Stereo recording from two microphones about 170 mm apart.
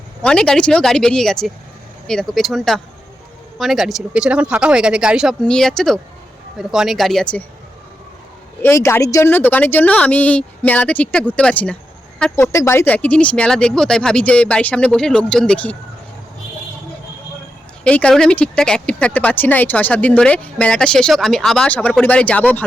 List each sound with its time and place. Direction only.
0.2 s speech: 5° left (ahead or behind)
8.6 s speech: 15° left (ahead or behind)
17.8 s speech: 5° left (ahead or behind)